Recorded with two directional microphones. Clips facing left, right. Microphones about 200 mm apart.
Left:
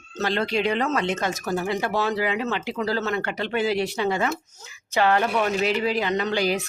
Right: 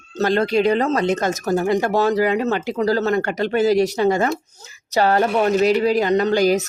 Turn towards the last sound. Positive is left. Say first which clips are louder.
# right 7 dB
turn(degrees=-45)  # may be behind; listen again after turning